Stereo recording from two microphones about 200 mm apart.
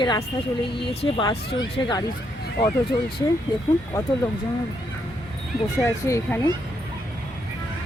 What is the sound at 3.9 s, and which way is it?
Speech, 15° left (ahead or behind).